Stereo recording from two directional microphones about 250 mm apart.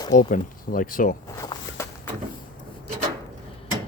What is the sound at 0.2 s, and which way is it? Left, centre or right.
Speech, left.